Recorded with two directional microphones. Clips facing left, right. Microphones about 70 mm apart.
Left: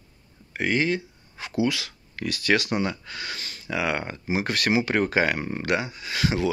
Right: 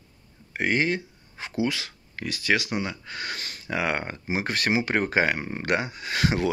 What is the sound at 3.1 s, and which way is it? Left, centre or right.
Speech, right.